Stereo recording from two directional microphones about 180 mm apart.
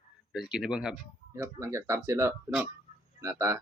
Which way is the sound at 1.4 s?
15° right (ahead or behind).